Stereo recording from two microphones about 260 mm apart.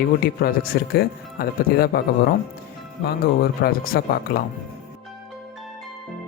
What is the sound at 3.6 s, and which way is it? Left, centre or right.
Speech, left.